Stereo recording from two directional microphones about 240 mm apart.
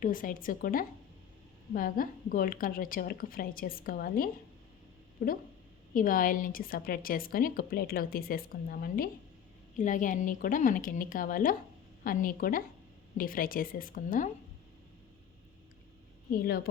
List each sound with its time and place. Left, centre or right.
0.0 s a woman's voice: left